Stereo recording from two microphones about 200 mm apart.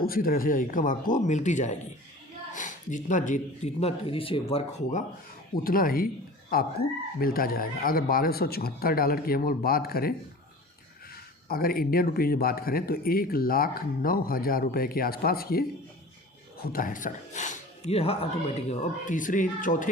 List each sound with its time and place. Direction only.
0.0 s speech: 45° left (ahead or behind)
5.6 s speech: 45° left (ahead or behind)
11.4 s speech: 50° left (ahead or behind)
16.6 s speech: 45° left (ahead or behind)